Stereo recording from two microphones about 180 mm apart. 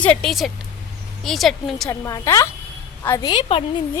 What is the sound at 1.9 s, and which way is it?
A woman's voice, 20° left (ahead or behind).